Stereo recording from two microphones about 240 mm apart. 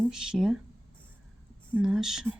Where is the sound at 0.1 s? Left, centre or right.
Centre.